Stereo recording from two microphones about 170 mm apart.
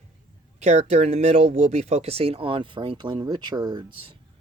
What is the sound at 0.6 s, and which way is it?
Speech, 40° right (ahead or behind).